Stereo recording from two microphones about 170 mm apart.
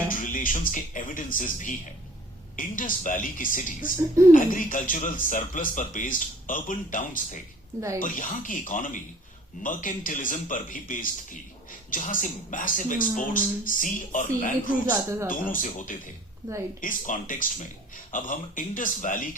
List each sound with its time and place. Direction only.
0.1 s speech: 50° left (ahead or behind)